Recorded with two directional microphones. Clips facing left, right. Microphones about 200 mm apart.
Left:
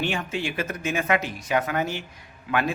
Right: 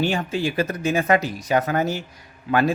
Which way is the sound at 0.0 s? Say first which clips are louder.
Right 5 dB; 35° right (ahead or behind).